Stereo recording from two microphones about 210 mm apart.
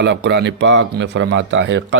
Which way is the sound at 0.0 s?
55° right (ahead or behind).